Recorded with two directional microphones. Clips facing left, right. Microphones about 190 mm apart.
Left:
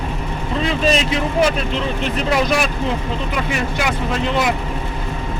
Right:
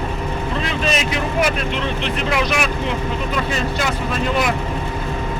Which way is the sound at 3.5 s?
15° left (ahead or behind).